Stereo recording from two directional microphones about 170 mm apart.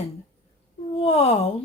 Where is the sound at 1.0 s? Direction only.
35° left (ahead or behind).